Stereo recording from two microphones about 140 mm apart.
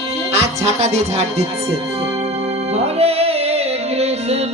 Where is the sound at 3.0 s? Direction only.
45° right (ahead or behind).